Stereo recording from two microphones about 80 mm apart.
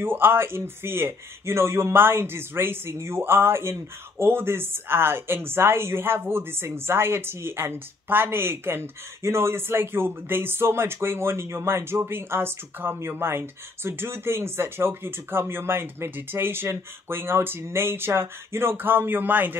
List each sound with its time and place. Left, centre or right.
0.0 s speech: right